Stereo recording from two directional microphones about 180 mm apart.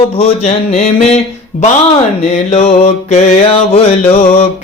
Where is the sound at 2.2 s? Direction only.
35° left (ahead or behind).